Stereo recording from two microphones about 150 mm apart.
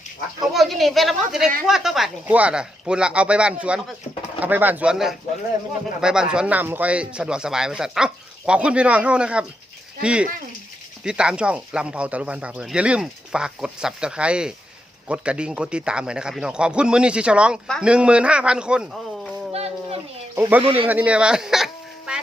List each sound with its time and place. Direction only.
0.5 s a woman's voice: centre (ahead or behind)
19.5 s a sound: 45° right (ahead or behind)
20.3 s speech: 10° right (ahead or behind)